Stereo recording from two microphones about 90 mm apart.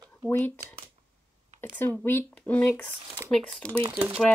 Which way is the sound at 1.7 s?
20° left (ahead or behind).